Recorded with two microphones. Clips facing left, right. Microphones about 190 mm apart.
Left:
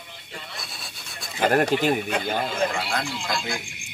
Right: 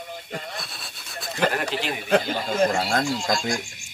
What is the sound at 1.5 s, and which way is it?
Speech, 50° left (ahead or behind).